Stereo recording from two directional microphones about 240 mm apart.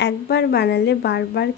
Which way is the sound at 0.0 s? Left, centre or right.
Left.